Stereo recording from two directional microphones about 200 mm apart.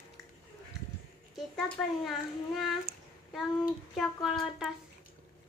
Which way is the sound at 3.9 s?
Centre (ahead or behind).